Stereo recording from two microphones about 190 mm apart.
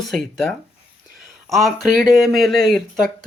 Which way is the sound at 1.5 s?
Centre (ahead or behind).